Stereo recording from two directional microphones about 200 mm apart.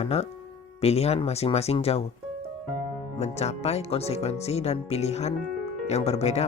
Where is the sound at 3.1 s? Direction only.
30° left (ahead or behind).